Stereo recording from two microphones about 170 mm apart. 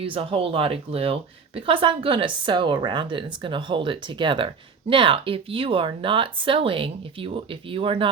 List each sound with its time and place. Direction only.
0.0 s speech: 35° right (ahead or behind)